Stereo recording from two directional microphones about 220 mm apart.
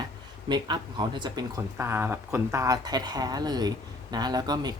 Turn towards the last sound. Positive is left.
turn(degrees=-20)  # may be behind; listen again after turning